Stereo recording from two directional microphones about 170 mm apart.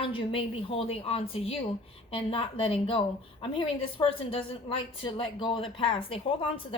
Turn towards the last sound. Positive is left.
turn(degrees=30)  # may be behind; listen again after turning